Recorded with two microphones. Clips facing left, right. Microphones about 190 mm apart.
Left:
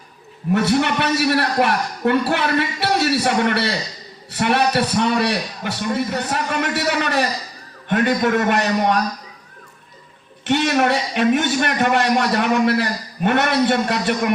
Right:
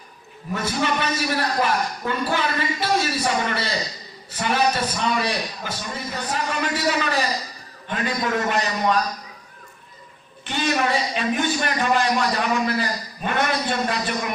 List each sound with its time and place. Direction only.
0.5 s a man's voice: 65° left (ahead or behind)
10.4 s a man's voice: 65° left (ahead or behind)